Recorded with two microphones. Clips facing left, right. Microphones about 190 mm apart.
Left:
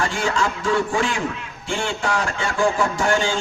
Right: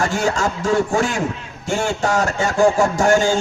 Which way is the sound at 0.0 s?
45° right (ahead or behind).